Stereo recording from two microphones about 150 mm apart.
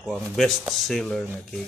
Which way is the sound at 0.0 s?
Centre (ahead or behind).